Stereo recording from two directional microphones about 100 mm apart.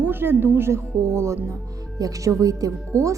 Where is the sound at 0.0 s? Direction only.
20° right (ahead or behind).